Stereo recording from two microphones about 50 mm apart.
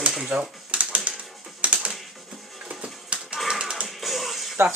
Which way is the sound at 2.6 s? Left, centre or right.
Right.